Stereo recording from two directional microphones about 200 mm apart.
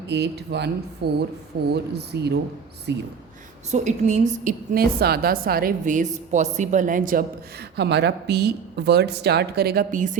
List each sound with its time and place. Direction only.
0.1 s speech: 55° right (ahead or behind)
3.7 s a woman's voice: 35° right (ahead or behind)